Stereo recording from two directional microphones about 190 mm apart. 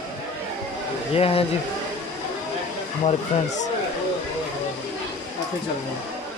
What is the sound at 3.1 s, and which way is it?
Speech, 40° left (ahead or behind).